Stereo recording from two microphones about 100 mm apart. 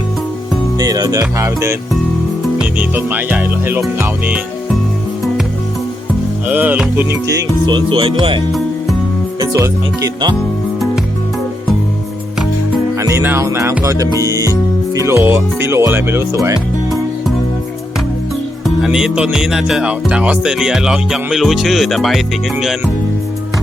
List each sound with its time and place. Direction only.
0.8 s music: 40° right (ahead or behind)
1.4 s speech: 30° right (ahead or behind)
2.7 s speech: 15° right (ahead or behind)
6.5 s speech: 15° right (ahead or behind)
7.7 s music: 55° right (ahead or behind)
9.4 s music: 40° right (ahead or behind)
13.0 s music: 30° right (ahead or behind)
14.9 s speech: 25° right (ahead or behind)
18.8 s music: 5° right (ahead or behind)